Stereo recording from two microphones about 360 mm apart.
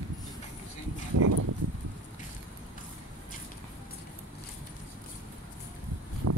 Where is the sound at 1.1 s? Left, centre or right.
Right.